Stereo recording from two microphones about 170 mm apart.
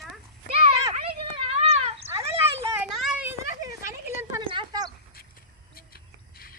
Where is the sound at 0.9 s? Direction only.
35° right (ahead or behind).